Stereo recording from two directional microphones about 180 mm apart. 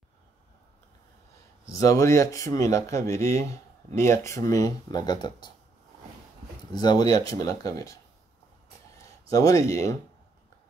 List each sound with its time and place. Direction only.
1.8 s speech: 20° left (ahead or behind)
6.7 s speech: 20° left (ahead or behind)
9.3 s speech: 20° left (ahead or behind)